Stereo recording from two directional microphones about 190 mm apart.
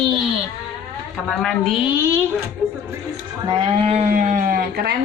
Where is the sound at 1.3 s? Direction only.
Centre (ahead or behind).